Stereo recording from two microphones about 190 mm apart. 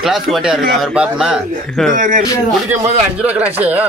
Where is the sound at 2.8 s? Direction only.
10° right (ahead or behind).